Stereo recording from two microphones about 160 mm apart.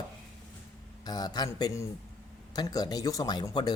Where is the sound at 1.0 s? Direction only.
25° left (ahead or behind).